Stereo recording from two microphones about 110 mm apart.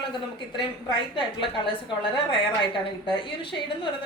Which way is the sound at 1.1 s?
45° left (ahead or behind).